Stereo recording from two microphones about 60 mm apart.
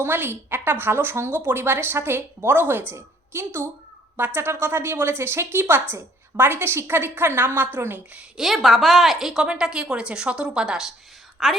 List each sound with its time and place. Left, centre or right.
0.0 s a woman's voice: right
8.4 s a woman's voice: centre
11.4 s a woman's voice: centre